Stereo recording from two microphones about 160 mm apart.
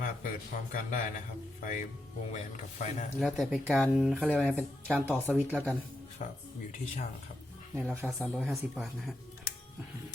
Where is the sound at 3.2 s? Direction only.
Centre (ahead or behind).